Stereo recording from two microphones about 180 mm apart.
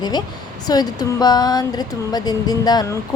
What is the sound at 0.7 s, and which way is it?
A woman's voice, 20° left (ahead or behind).